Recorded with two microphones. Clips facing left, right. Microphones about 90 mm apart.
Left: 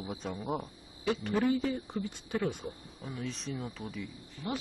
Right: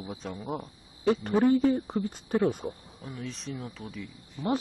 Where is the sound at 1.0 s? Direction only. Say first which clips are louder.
Right 6 dB; 40° right (ahead or behind).